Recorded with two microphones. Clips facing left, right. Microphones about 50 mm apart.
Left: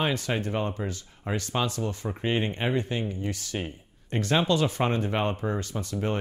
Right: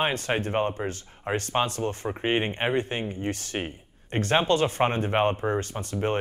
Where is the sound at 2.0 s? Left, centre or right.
Right.